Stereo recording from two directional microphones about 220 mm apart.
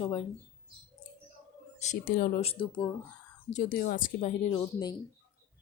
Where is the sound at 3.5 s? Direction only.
35° left (ahead or behind).